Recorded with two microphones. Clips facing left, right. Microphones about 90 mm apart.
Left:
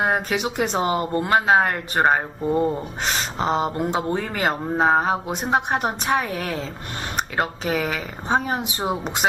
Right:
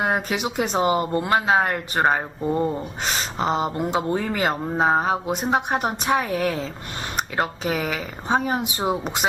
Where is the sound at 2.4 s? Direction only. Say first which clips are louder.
Left 1 dB; 5° left (ahead or behind).